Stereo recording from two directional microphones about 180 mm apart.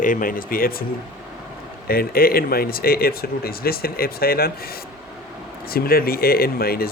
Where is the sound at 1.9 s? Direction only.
55° left (ahead or behind).